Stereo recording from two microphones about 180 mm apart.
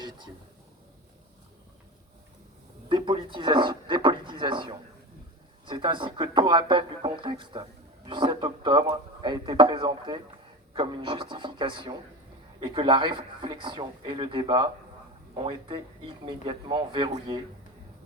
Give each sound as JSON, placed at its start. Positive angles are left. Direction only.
{"t": 2.9, "sound": "speech", "side_deg": -30}